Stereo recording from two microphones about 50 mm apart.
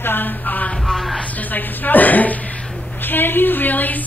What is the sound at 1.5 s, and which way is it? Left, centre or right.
A woman's voice, left.